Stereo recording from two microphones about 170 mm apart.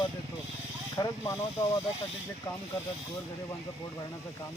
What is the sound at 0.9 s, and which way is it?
Speech, 20° left (ahead or behind).